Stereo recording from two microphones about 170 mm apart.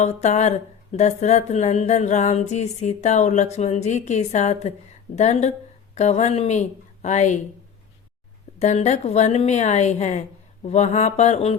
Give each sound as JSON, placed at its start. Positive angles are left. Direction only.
{"t": 0.0, "sound": "speech", "side_deg": 40}
{"t": 8.5, "sound": "speech", "side_deg": 40}